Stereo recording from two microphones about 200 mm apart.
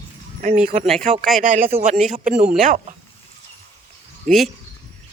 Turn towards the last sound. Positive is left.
turn(degrees=-40)  # may be behind; listen again after turning